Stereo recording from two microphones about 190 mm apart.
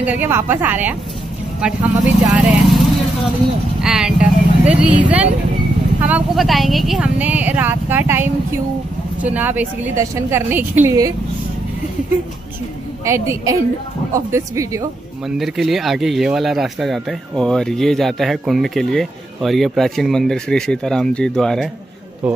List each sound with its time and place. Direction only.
0.0 s speech: 10° right (ahead or behind)
3.8 s speech: 5° right (ahead or behind)
13.0 s speech: 15° right (ahead or behind)
15.2 s speech: centre (ahead or behind)